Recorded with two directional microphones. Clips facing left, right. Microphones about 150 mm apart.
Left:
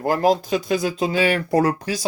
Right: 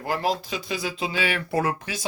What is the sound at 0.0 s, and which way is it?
Speech, 45° left (ahead or behind).